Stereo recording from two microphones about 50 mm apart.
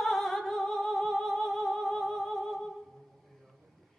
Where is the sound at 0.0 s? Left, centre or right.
Centre.